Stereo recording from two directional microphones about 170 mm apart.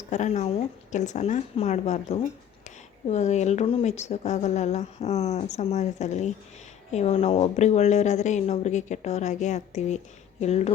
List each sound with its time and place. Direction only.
0.1 s a woman's voice: 40° left (ahead or behind)